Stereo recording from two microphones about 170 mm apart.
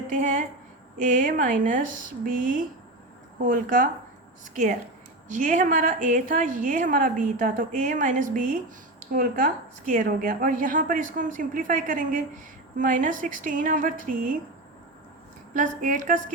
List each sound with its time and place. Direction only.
0.1 s a woman's voice: 50° right (ahead or behind)
15.5 s a woman's voice: 50° right (ahead or behind)